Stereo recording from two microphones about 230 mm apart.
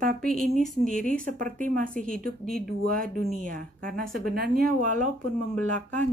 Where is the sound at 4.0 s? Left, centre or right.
Right.